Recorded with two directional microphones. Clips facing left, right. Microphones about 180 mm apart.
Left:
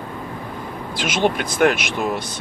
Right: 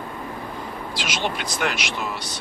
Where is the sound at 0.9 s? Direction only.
50° left (ahead or behind).